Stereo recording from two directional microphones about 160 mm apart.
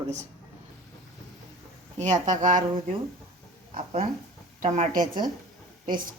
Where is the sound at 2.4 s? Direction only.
50° right (ahead or behind).